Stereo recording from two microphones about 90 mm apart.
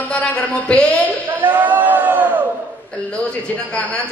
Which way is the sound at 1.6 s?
20° right (ahead or behind).